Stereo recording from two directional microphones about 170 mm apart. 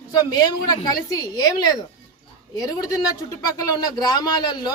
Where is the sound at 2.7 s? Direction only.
20° left (ahead or behind).